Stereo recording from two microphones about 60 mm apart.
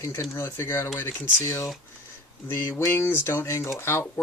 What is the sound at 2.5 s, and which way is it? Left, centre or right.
Speech, left.